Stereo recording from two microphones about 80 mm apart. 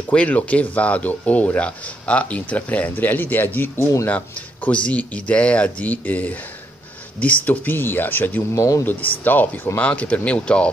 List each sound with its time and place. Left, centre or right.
0.1 s speech: centre; by 4.1 s left
4.1 s speech: centre
8.5 s speech: left
9.2 s speech: left